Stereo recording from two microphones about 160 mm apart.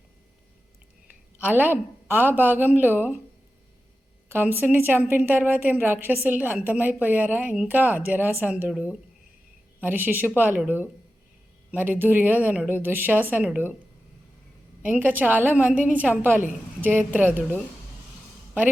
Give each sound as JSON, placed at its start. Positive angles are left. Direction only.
{"t": 1.4, "sound": "a woman's voice", "side_deg": -10}
{"t": 4.3, "sound": "a woman's voice", "side_deg": -15}
{"t": 14.8, "sound": "a woman's voice", "side_deg": -10}